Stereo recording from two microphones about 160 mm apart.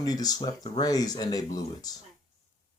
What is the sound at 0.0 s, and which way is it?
Speech, 25° left (ahead or behind).